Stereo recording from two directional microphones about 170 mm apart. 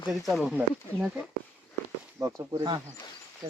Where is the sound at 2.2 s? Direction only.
20° right (ahead or behind).